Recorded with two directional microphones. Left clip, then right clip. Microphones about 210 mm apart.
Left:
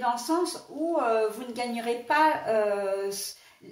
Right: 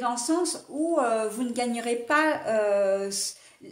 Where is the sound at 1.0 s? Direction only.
50° right (ahead or behind).